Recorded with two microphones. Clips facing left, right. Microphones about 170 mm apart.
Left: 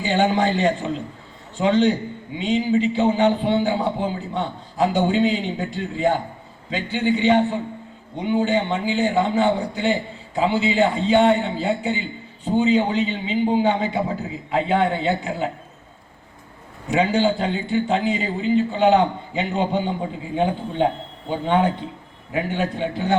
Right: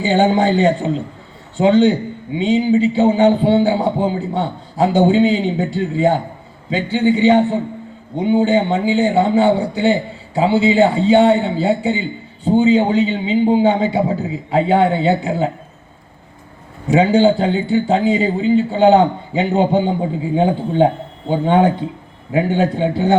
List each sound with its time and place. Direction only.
0.0 s a man's voice: 30° right (ahead or behind)
16.9 s speech: 30° right (ahead or behind)